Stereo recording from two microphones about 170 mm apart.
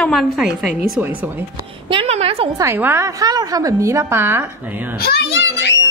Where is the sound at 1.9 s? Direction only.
35° right (ahead or behind).